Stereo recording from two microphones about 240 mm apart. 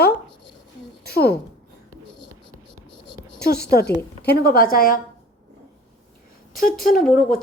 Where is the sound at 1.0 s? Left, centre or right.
Left.